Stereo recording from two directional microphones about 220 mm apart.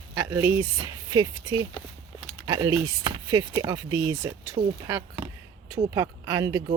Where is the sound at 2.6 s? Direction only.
15° right (ahead or behind).